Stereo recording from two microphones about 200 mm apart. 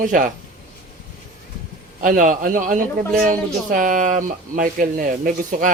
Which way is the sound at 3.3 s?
40° right (ahead or behind).